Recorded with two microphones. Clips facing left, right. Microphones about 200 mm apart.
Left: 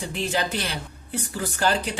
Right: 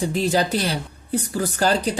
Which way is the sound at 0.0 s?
35° right (ahead or behind).